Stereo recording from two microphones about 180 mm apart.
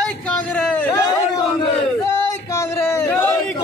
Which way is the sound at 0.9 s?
20° left (ahead or behind).